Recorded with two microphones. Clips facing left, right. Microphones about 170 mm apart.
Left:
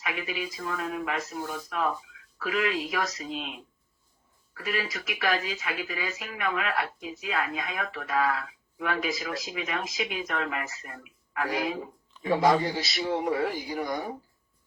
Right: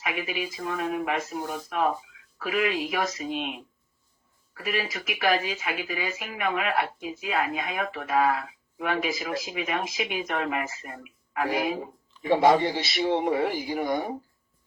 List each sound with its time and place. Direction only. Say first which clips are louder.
0.0 s speech: right 2 dB; 30° right (ahead or behind)
4.5 s speech: right 2 dB; 25° right (ahead or behind)